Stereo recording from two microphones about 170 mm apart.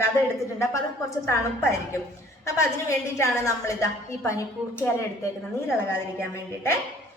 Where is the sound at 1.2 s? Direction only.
15° left (ahead or behind).